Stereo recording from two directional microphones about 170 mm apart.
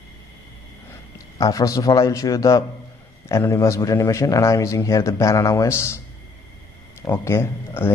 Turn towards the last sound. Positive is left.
turn(degrees=15)  # may be behind; listen again after turning